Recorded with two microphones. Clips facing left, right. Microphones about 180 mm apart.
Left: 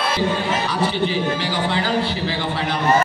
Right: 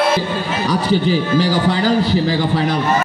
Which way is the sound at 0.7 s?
40° right (ahead or behind).